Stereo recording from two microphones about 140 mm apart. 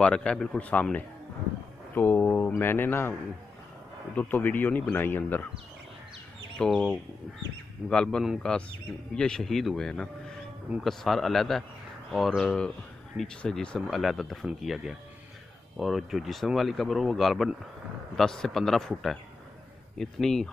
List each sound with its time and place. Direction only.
0.0 s a man's voice: 5° left (ahead or behind)
4.2 s a man's voice: 10° left (ahead or behind)
6.6 s speech: centre (ahead or behind)